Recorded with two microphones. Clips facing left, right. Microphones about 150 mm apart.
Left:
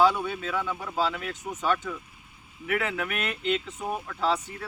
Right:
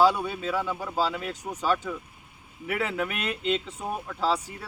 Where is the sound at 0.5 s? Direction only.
10° right (ahead or behind).